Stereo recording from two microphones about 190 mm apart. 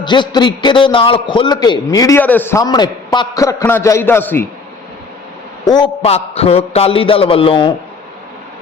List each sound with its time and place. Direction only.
0.0 s a man's voice: 25° left (ahead or behind)
5.6 s a man's voice: 20° left (ahead or behind)
6.0 s a man's voice: 35° left (ahead or behind)